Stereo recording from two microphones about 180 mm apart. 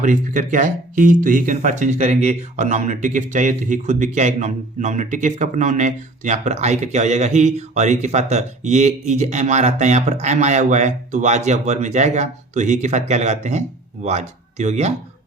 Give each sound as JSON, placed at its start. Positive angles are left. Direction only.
{"t": 0.0, "sound": "speech", "side_deg": -45}